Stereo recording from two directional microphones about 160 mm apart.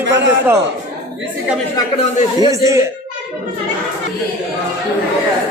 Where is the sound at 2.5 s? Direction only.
20° right (ahead or behind).